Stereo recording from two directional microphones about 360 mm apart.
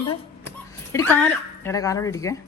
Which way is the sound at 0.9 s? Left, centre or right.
Centre.